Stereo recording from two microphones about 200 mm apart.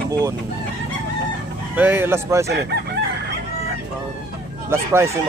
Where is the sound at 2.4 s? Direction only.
55° right (ahead or behind).